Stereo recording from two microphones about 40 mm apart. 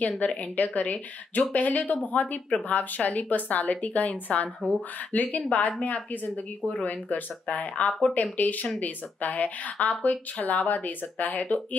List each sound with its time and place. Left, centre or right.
0.2 s speech: left